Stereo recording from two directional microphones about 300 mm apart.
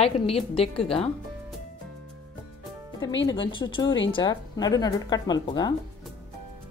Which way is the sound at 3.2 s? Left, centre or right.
Centre.